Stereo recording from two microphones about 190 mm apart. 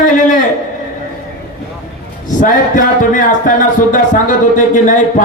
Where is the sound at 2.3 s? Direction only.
45° left (ahead or behind).